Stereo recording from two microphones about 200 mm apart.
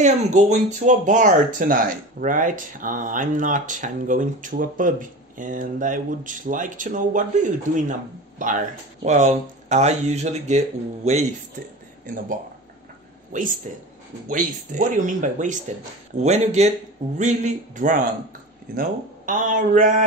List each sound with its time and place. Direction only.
0.0 s speech: 35° right (ahead or behind)
13.3 s speech: 40° right (ahead or behind)